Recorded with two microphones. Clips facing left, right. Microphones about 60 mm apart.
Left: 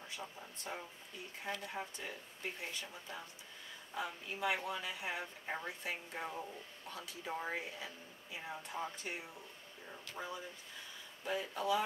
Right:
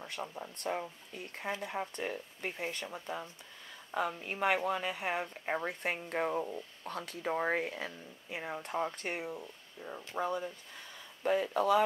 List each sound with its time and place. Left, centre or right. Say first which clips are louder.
0.0 s speech: right 7 dB; right